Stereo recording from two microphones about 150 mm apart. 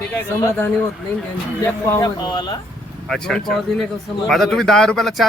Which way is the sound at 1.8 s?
20° left (ahead or behind).